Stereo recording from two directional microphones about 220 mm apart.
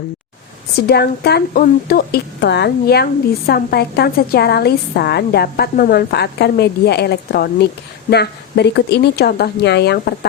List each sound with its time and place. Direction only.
0.9 s speech: 45° left (ahead or behind)